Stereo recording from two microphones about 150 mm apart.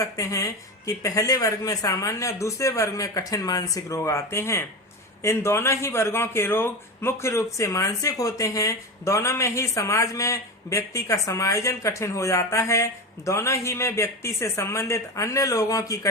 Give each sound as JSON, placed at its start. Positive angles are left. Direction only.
{"t": 0.0, "sound": "speech", "side_deg": 20}